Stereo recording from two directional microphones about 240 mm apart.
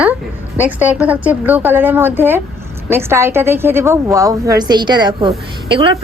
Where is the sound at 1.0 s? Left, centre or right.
Centre.